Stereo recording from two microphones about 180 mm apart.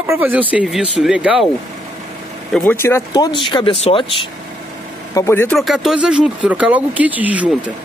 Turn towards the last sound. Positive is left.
turn(degrees=-10)  # may be behind; listen again after turning